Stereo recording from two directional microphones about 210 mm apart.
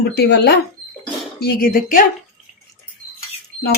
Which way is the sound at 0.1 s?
50° left (ahead or behind).